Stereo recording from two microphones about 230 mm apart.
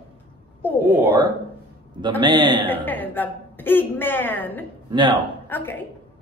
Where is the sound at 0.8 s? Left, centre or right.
Centre.